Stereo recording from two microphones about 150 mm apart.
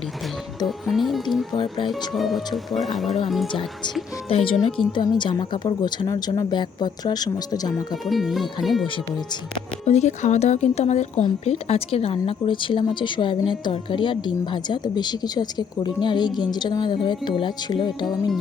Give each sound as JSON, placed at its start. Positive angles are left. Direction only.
{"t": 0.6, "sound": "speech", "side_deg": 0}
{"t": 1.5, "sound": "speech", "side_deg": 30}
{"t": 2.1, "sound": "speech", "side_deg": 0}
{"t": 4.3, "sound": "a woman's voice", "side_deg": 40}
{"t": 8.0, "sound": "speech", "side_deg": 0}
{"t": 9.8, "sound": "a woman's voice", "side_deg": 50}